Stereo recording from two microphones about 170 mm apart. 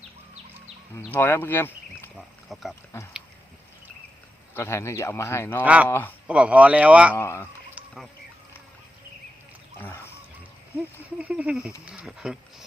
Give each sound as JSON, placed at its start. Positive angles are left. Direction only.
{"t": 0.9, "sound": "speech", "side_deg": 10}
{"t": 2.1, "sound": "a sound", "side_deg": 0}
{"t": 4.5, "sound": "speech", "side_deg": 15}
{"t": 5.6, "sound": "speech", "side_deg": -10}
{"t": 5.9, "sound": "speech", "side_deg": 10}
{"t": 6.2, "sound": "speech", "side_deg": -5}
{"t": 7.2, "sound": "speech", "side_deg": 15}
{"t": 9.7, "sound": "a sound", "side_deg": 15}
{"t": 11.2, "sound": "speech", "side_deg": -5}